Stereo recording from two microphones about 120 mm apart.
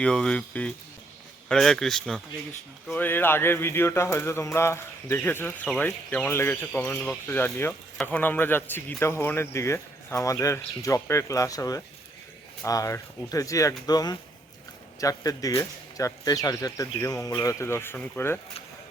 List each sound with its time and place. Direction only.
0.0 s speech: 5° left (ahead or behind)
2.9 s a man's voice: 20° left (ahead or behind)